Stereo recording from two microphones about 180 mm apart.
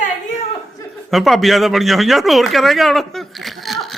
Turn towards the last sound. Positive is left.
turn(degrees=0)  # may be behind; listen again after turning